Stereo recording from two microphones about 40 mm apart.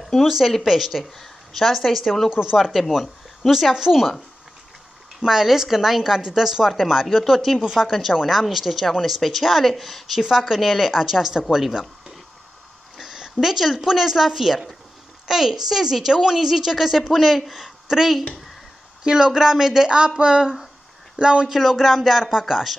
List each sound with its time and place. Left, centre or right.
0.2 s a woman's voice: centre
2.2 s a woman's voice: centre
2.5 s a woman's voice: centre
5.2 s a woman's voice: centre
12.9 s a woman's voice: centre
20.2 s speech: right
21.5 s a woman's voice: centre